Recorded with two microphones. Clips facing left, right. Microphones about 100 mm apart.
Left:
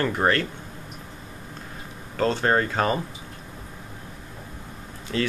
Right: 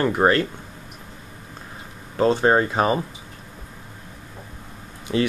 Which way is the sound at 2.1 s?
15° right (ahead or behind).